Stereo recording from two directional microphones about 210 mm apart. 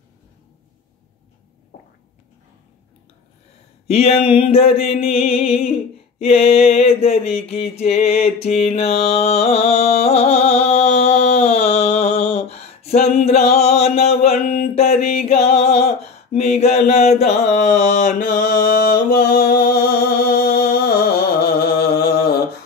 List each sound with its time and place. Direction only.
3.8 s mantra: 30° left (ahead or behind)
14.5 s music: 45° left (ahead or behind)
15.2 s a sound: 30° left (ahead or behind); by 20.9 s 50° left (ahead or behind)
21.4 s mantra: 50° left (ahead or behind)